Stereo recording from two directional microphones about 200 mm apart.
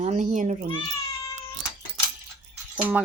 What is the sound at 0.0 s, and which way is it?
Speech, 35° right (ahead or behind).